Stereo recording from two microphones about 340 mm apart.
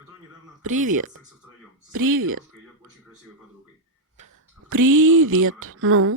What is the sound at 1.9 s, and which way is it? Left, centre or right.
Speech, right.